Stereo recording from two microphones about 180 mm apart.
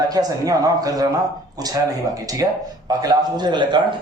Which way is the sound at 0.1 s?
20° right (ahead or behind).